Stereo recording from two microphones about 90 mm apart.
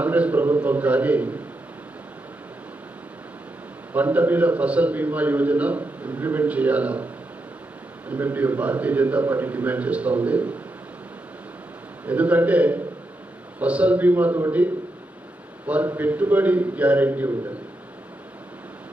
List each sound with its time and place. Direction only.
0.0 s a man's voice: 15° right (ahead or behind)
3.9 s a man's voice: 15° right (ahead or behind)
8.1 s a man's voice: 20° right (ahead or behind)
12.0 s a man's voice: 15° right (ahead or behind)
15.6 s a man's voice: 15° right (ahead or behind)